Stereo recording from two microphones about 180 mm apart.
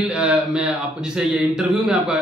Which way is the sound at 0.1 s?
5° right (ahead or behind).